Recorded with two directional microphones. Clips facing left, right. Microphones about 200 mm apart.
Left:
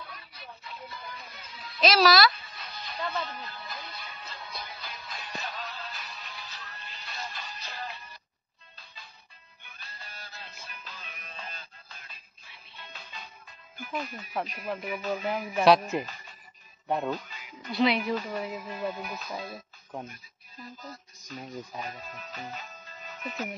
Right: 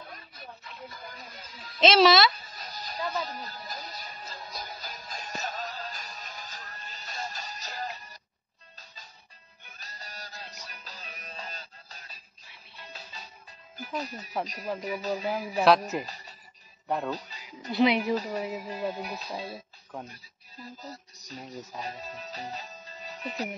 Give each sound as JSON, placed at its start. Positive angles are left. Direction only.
{"t": 0.0, "sound": "music", "side_deg": -45}
{"t": 1.8, "sound": "speech", "side_deg": -25}
{"t": 2.3, "sound": "music", "side_deg": -40}
{"t": 13.7, "sound": "speech", "side_deg": -40}
{"t": 16.0, "sound": "a sound", "side_deg": -35}
{"t": 16.8, "sound": "speech", "side_deg": 0}
{"t": 17.1, "sound": "music", "side_deg": -35}
{"t": 17.7, "sound": "a woman's voice", "side_deg": -15}
{"t": 18.9, "sound": "speech", "side_deg": -35}